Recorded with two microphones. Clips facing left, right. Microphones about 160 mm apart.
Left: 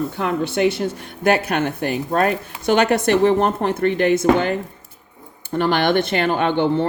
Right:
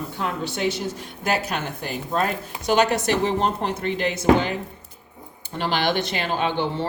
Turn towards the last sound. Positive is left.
turn(degrees=55)  # may be behind; listen again after turning